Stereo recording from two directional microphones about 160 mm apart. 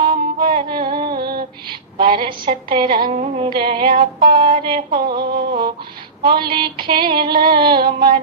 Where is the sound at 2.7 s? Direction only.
30° right (ahead or behind).